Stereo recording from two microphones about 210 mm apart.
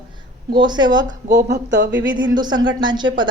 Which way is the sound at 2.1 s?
20° right (ahead or behind).